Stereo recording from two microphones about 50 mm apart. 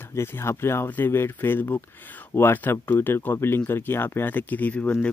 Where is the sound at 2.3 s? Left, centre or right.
Left.